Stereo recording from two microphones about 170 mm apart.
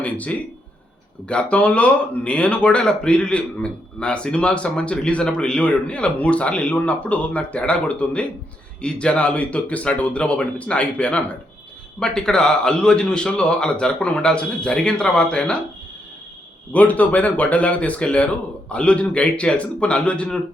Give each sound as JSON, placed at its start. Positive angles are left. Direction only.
{"t": 0.0, "sound": "a man's voice", "side_deg": 10}
{"t": 16.7, "sound": "speech", "side_deg": 10}